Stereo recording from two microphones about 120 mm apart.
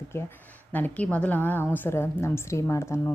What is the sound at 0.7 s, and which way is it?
A woman's voice, 15° left (ahead or behind).